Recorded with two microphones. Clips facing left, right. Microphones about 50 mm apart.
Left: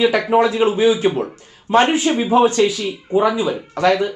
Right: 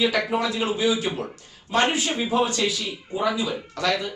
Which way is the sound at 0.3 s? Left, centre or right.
Left.